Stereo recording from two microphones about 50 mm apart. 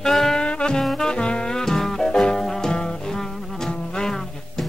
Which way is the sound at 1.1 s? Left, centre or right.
Centre.